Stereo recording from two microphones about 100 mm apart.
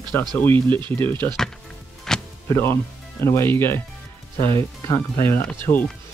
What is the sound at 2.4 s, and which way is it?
Speech, 25° left (ahead or behind).